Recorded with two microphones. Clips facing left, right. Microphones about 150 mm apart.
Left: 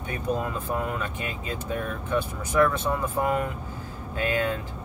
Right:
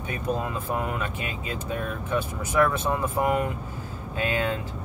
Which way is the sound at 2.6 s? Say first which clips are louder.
Even; 15° right (ahead or behind).